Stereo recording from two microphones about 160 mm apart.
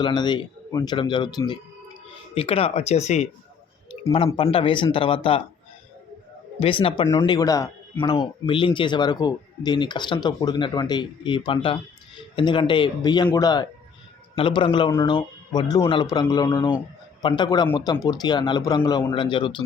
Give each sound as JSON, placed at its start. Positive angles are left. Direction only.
{"t": 0.0, "sound": "a man's voice", "side_deg": 30}
{"t": 4.4, "sound": "speech", "side_deg": 35}
{"t": 6.6, "sound": "speech", "side_deg": 35}